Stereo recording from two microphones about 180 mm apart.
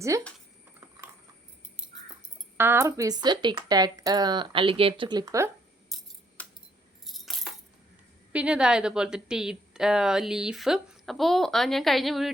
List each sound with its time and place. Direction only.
2.6 s speech: 15° right (ahead or behind)
5.9 s coin: centre (ahead or behind)
6.4 s keys jangling: 10° left (ahead or behind)
8.3 s a woman's voice: 5° right (ahead or behind)